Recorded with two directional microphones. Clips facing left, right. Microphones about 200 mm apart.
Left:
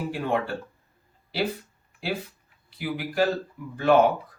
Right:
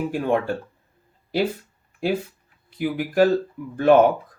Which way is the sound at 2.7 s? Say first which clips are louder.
Right 6 dB; 50° right (ahead or behind).